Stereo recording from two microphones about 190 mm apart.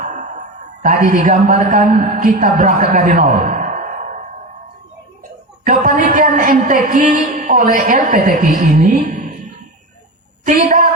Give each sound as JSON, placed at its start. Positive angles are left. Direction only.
{"t": 0.0, "sound": "a man's voice", "side_deg": -40}
{"t": 5.6, "sound": "a woman's voice", "side_deg": -45}
{"t": 10.4, "sound": "a woman's voice", "side_deg": -40}